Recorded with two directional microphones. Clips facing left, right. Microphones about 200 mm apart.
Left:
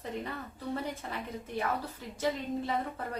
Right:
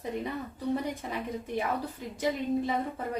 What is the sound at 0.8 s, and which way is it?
A woman's voice, 15° right (ahead or behind).